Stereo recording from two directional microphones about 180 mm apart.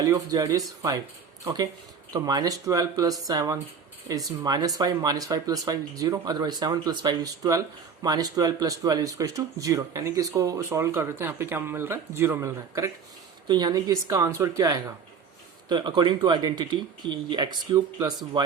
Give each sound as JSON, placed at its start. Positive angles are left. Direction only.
{"t": 0.0, "sound": "speech", "side_deg": -20}
{"t": 2.1, "sound": "speech", "side_deg": -20}